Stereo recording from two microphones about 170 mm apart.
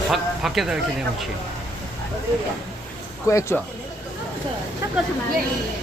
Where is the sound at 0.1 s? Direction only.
Centre (ahead or behind).